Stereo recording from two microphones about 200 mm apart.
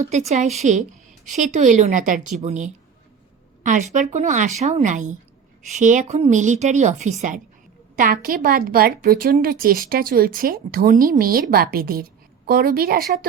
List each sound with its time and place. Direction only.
0.0 s a woman's voice: 35° right (ahead or behind)